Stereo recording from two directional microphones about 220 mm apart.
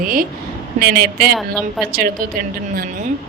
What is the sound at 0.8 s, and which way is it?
Speech, 45° right (ahead or behind).